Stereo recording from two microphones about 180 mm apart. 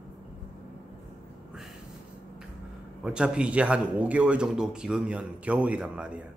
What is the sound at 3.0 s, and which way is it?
A man's voice, 5° right (ahead or behind).